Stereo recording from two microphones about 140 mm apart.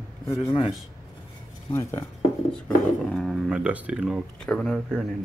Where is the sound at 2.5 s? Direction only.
5° left (ahead or behind).